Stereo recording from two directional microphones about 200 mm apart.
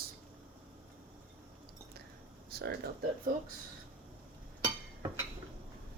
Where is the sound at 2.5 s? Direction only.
50° right (ahead or behind).